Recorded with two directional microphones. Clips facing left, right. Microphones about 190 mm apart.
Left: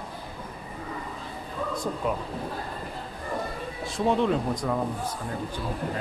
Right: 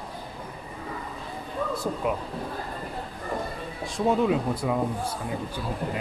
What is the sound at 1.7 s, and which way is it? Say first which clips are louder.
Speech: even; 5° right (ahead or behind).